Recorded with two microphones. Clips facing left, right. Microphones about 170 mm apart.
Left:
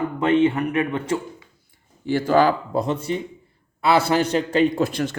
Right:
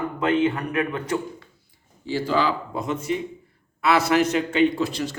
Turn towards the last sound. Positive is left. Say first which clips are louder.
# left 3 dB
turn(degrees=55)  # may be behind; listen again after turning